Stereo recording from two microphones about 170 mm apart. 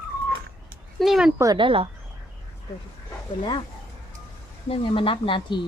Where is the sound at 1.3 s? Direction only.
25° right (ahead or behind).